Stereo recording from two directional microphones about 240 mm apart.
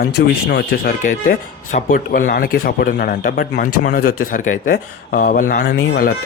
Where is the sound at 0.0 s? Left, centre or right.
Left.